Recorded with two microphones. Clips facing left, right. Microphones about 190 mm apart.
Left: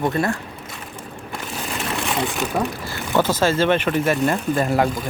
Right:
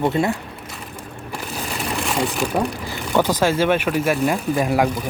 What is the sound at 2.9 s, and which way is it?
Speech, 15° right (ahead or behind).